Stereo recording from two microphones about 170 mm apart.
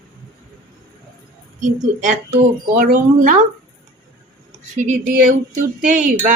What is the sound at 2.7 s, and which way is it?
Speech, 50° right (ahead or behind).